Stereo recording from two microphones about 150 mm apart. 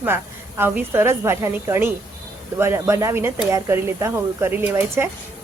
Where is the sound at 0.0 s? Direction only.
15° right (ahead or behind).